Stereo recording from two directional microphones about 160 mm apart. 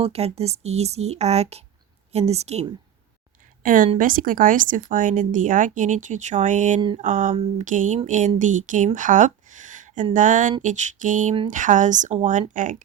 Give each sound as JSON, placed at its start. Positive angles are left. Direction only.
{"t": 0.0, "sound": "speech", "side_deg": -40}
{"t": 3.6, "sound": "a woman's voice", "side_deg": -60}